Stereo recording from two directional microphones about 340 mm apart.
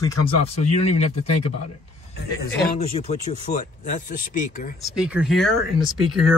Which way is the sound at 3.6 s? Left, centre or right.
Left.